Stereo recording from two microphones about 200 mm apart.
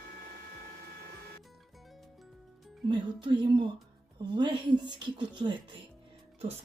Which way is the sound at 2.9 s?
20° right (ahead or behind).